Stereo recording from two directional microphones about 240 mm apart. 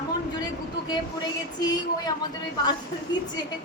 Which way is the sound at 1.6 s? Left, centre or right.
Centre.